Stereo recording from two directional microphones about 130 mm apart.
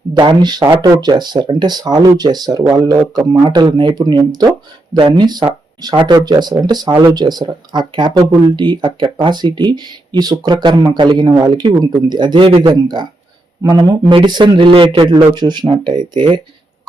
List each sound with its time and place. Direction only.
0.1 s speech: 35° right (ahead or behind)